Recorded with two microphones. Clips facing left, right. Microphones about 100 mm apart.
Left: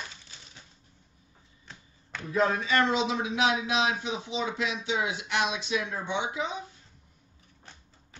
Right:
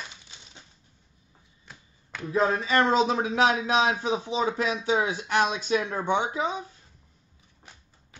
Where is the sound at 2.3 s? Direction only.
30° right (ahead or behind).